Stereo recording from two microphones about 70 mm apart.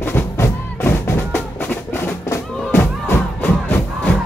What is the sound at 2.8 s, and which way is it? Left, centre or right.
Music, left.